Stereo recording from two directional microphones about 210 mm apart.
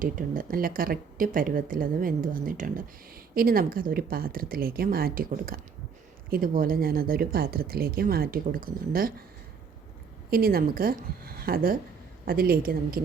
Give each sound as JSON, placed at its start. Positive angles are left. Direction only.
{"t": 0.0, "sound": "speech", "side_deg": -40}
{"t": 10.2, "sound": "speech", "side_deg": -45}